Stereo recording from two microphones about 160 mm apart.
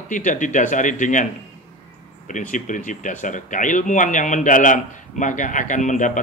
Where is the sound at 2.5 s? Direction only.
55° left (ahead or behind).